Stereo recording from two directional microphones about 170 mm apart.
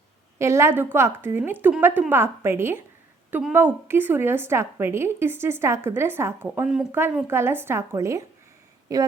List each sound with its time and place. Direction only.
0.3 s a woman's voice: 15° right (ahead or behind)